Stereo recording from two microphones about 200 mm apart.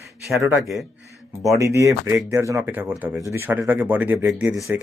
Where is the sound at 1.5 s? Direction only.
15° right (ahead or behind).